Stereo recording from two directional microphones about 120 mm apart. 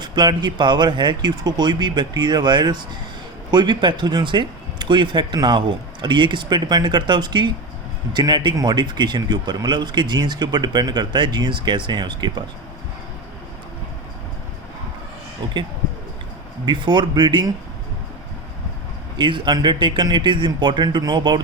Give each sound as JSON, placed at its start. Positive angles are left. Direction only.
{"t": 0.0, "sound": "speech", "side_deg": -35}
{"t": 16.6, "sound": "speech", "side_deg": -40}
{"t": 19.1, "sound": "speech", "side_deg": -40}